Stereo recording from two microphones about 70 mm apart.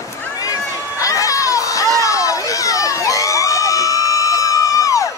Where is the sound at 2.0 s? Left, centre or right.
Left.